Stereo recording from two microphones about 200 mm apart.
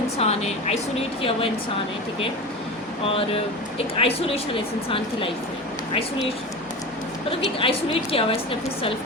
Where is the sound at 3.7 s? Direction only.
30° left (ahead or behind).